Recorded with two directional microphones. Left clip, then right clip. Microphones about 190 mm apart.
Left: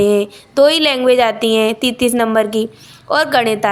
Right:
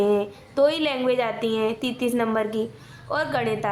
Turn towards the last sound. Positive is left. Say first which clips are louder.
# left 11 dB
turn(degrees=30)  # may be behind; listen again after turning